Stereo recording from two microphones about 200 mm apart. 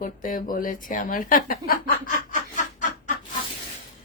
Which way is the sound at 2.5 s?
40° left (ahead or behind).